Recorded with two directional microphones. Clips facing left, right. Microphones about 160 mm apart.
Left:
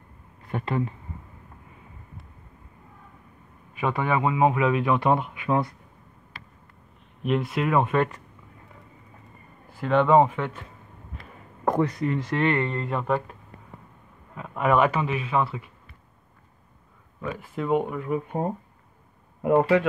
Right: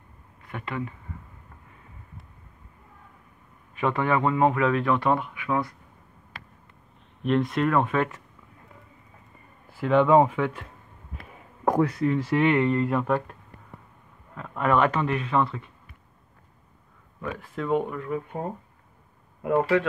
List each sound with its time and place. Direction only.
0.5 s speech: 35° left (ahead or behind)
3.7 s speech: 10° left (ahead or behind)
7.2 s speech: 5° left (ahead or behind)
9.8 s speech: 5° right (ahead or behind)
17.2 s speech: 5° left (ahead or behind)
19.4 s speech: 20° left (ahead or behind)